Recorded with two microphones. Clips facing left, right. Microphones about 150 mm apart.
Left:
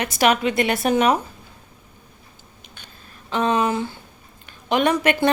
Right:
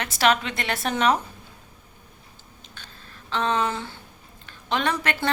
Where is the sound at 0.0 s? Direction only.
15° left (ahead or behind).